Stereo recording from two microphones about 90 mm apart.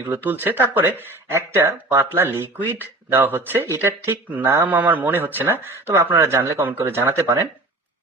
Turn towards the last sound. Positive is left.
turn(degrees=-30)  # may be behind; listen again after turning